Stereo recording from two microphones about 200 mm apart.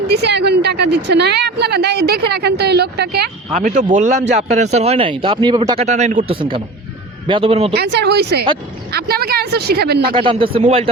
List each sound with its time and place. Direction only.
0.1 s a woman's voice: 55° right (ahead or behind)
3.5 s speech: 40° right (ahead or behind)
7.8 s a woman's voice: 55° right (ahead or behind)
10.2 s speech: 25° right (ahead or behind)